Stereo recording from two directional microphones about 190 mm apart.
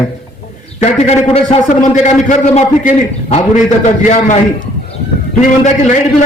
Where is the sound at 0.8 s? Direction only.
35° left (ahead or behind).